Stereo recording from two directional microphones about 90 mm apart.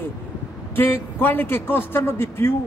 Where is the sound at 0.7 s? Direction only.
25° left (ahead or behind).